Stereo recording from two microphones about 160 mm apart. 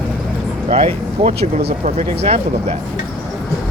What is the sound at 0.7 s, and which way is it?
Speech, 40° right (ahead or behind).